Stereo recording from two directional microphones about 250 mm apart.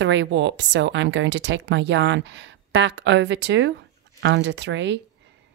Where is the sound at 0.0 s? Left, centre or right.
Right.